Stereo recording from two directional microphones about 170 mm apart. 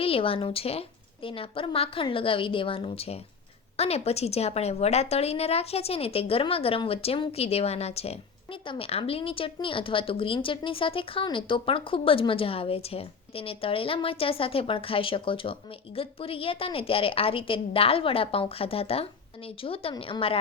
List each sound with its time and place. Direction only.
0.0 s speech: 35° left (ahead or behind)